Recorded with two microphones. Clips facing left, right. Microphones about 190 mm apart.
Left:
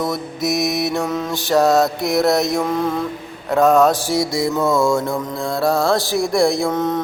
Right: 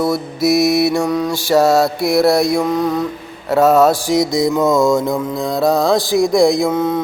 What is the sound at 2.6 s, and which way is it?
Music, centre (ahead or behind).